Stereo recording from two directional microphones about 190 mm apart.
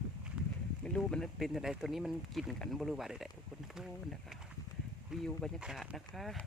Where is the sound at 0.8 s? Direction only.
5° left (ahead or behind).